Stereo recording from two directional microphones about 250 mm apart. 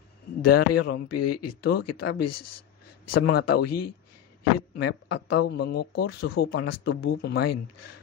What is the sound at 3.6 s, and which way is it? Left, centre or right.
Speech, left.